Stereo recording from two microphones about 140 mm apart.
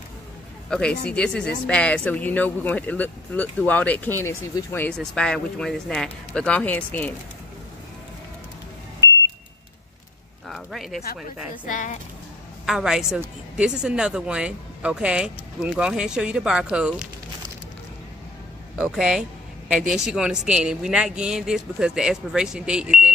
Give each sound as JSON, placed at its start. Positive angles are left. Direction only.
{"t": 0.7, "sound": "speech", "side_deg": 5}
{"t": 10.5, "sound": "speech", "side_deg": 0}
{"t": 11.6, "sound": "speech", "side_deg": 65}
{"t": 12.6, "sound": "speech", "side_deg": -5}
{"t": 18.8, "sound": "speech", "side_deg": -5}